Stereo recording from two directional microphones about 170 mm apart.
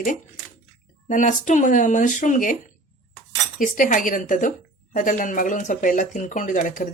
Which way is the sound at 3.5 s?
50° left (ahead or behind).